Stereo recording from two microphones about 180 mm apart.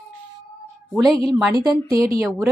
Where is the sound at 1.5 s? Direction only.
20° right (ahead or behind).